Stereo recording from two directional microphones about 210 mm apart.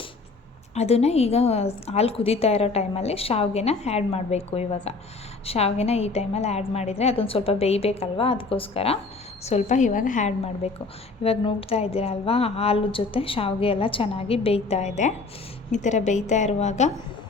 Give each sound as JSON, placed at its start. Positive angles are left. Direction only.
{"t": 0.7, "sound": "a woman's voice", "side_deg": 30}